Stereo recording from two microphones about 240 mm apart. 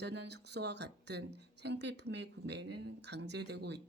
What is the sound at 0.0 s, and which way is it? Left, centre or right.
Speech, right.